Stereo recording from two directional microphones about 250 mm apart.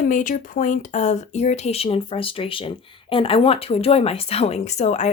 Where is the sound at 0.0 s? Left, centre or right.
Left.